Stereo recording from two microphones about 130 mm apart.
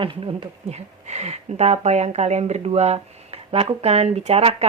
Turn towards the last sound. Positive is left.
turn(degrees=-50)  # may be behind; listen again after turning